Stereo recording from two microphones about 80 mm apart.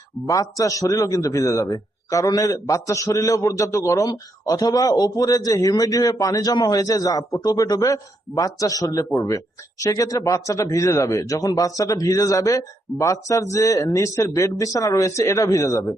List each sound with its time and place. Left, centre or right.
0.3 s a man's voice: left